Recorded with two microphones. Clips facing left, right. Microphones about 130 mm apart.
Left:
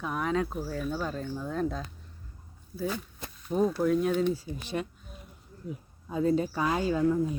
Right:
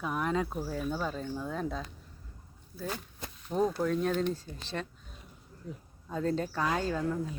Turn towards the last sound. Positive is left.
turn(degrees=10)  # may be behind; listen again after turning